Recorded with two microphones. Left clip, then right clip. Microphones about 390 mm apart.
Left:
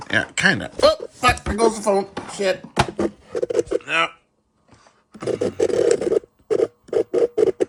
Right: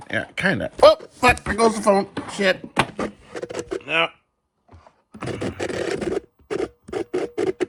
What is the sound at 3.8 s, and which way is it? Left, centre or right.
Speech, centre.